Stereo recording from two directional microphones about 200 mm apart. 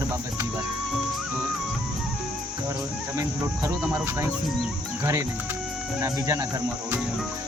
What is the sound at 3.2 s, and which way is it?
Speech, 15° right (ahead or behind).